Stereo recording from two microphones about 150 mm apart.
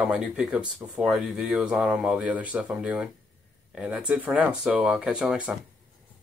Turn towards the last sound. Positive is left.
turn(degrees=-5)  # may be behind; listen again after turning